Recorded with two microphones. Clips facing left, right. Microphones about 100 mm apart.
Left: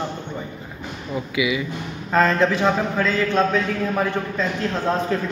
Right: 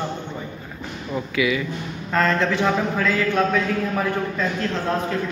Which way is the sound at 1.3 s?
15° left (ahead or behind).